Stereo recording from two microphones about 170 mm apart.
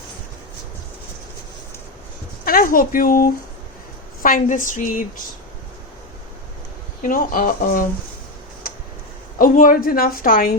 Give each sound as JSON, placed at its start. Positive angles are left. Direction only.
{"t": 2.4, "sound": "a woman's voice", "side_deg": 55}
{"t": 7.0, "sound": "a woman's voice", "side_deg": 55}
{"t": 9.4, "sound": "a woman's voice", "side_deg": 55}